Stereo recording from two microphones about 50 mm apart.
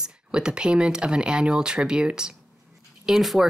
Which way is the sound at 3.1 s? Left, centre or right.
Centre.